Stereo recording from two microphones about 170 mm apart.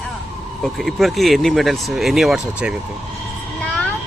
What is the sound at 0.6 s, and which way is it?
Speech, centre (ahead or behind).